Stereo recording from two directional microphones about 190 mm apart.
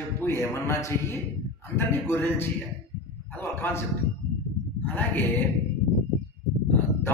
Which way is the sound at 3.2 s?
10° left (ahead or behind).